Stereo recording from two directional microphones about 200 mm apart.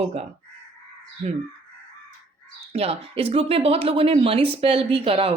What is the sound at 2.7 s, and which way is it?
Speech, 30° right (ahead or behind).